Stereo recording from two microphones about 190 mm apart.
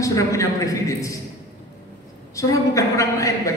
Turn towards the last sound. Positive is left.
turn(degrees=15)  # may be behind; listen again after turning